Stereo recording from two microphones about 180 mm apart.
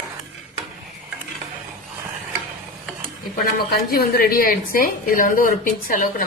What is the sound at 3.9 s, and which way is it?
A woman's voice, 55° left (ahead or behind).